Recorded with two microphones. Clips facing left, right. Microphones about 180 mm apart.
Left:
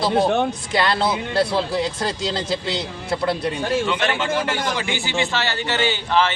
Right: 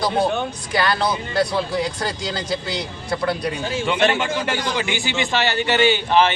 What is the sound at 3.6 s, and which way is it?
Speech, 60° left (ahead or behind).